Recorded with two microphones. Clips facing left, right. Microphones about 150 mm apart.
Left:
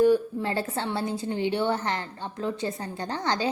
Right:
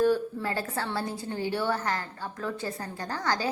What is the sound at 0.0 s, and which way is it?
A woman's voice, 15° left (ahead or behind).